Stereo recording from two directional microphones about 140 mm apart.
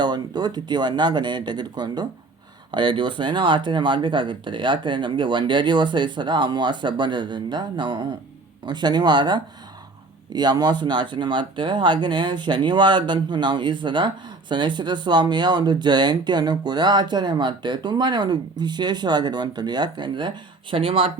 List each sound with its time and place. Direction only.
0.0 s speech: 30° right (ahead or behind)